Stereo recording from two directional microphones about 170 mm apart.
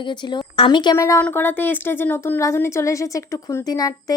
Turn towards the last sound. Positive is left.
turn(degrees=25)  # may be behind; listen again after turning